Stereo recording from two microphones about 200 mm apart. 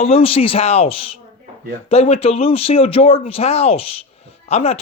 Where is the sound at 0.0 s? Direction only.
30° left (ahead or behind).